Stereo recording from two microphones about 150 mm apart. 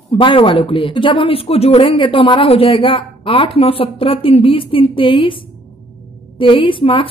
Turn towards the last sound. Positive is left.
turn(degrees=35)  # may be behind; listen again after turning